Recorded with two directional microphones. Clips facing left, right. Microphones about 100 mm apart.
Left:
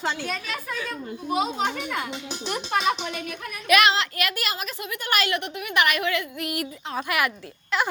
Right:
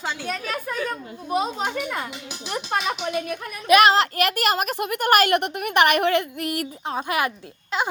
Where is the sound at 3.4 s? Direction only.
30° right (ahead or behind).